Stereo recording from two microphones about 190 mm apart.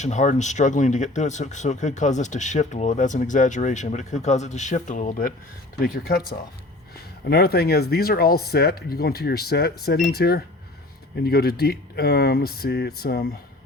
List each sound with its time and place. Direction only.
0.0 s speech: 40° left (ahead or behind)
7.3 s speech: 55° left (ahead or behind)